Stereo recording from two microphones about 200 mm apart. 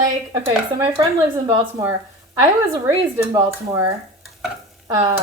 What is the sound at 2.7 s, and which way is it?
Speech, 15° right (ahead or behind).